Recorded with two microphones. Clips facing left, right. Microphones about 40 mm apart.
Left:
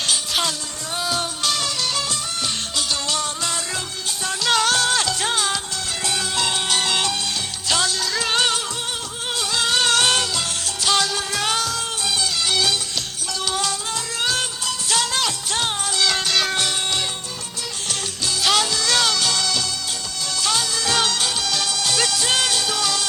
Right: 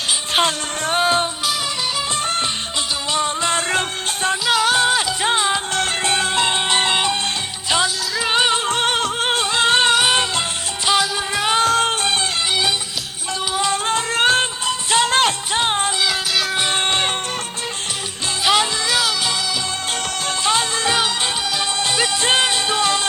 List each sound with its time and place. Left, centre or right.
0.3 s music: right
3.1 s music: right
3.5 s music: right
4.4 s music: centre
5.7 s music: right; by 8.5 s centre
8.7 s music: right
9.9 s music: centre
11.5 s music: right
13.8 s music: right
16.0 s music: centre
16.6 s music: right
18.4 s music: centre
18.9 s music: centre
20.4 s music: right